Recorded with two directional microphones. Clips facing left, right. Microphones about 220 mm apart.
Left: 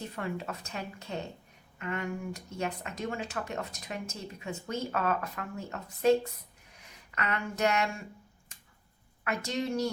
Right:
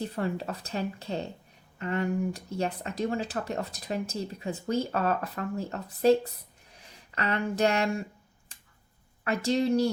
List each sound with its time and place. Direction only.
0.2 s speech: 35° right (ahead or behind)
9.2 s speech: 35° right (ahead or behind)